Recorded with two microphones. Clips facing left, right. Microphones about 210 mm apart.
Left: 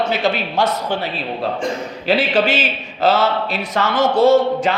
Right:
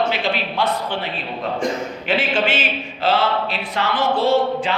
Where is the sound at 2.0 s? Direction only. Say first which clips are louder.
Left 4 dB; 40° left (ahead or behind).